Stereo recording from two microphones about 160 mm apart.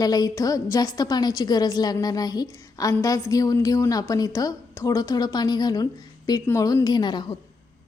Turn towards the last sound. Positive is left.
turn(degrees=25)  # may be behind; listen again after turning